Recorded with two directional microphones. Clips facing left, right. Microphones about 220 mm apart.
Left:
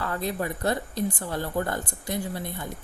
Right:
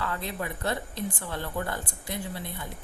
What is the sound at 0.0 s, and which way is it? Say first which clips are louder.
A woman's voice: left 4 dB; 40° left (ahead or behind).